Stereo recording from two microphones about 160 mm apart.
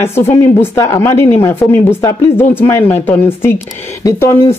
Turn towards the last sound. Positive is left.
turn(degrees=15)  # may be behind; listen again after turning